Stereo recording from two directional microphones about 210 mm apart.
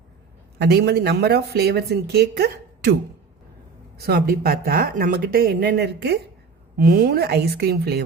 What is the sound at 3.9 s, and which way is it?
Speech, 45° right (ahead or behind).